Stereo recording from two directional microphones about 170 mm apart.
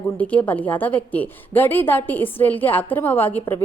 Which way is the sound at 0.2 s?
10° left (ahead or behind).